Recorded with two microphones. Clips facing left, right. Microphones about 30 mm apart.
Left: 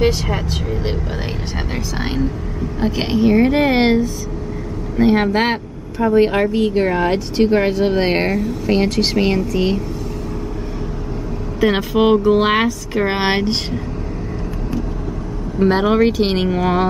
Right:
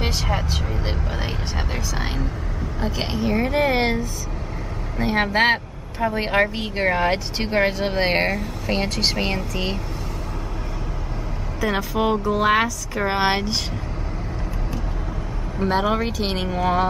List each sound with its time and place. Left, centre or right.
0.0 s speech: centre
2.8 s a woman's voice: centre
4.9 s speech: centre
11.6 s speech: left
15.6 s a woman's voice: centre